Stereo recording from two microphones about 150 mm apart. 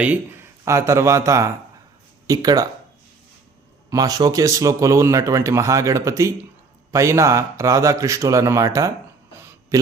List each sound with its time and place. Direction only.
0.6 s speech: 20° right (ahead or behind)
3.8 s speech: 25° right (ahead or behind)
9.3 s a sound: 15° right (ahead or behind)